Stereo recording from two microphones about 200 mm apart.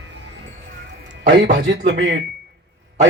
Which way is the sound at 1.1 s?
60° right (ahead or behind).